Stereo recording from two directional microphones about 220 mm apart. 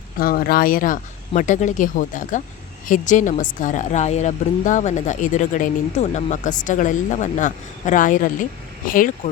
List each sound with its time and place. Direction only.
0.2 s a woman's voice: 40° left (ahead or behind)